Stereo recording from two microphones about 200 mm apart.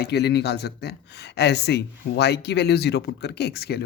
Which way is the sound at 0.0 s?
55° left (ahead or behind).